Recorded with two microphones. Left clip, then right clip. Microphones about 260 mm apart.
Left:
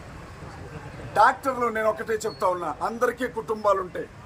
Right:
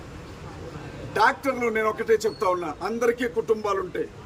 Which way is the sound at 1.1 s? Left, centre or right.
Centre.